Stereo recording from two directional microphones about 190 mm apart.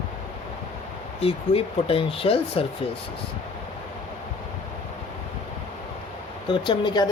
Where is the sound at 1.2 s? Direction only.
30° left (ahead or behind).